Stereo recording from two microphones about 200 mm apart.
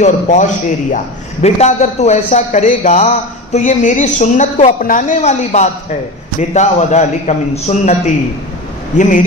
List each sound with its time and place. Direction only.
0.0 s a woman's voice: 35° left (ahead or behind)